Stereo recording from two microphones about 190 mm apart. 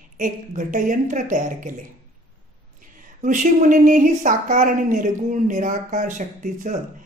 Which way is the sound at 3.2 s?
45° right (ahead or behind).